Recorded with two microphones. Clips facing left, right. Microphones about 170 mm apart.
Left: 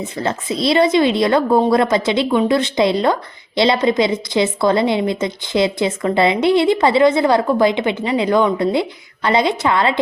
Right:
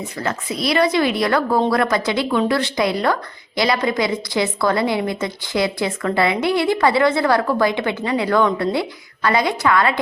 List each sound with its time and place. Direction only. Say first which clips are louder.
0.0 s speech: left 3 dB; 25° left (ahead or behind)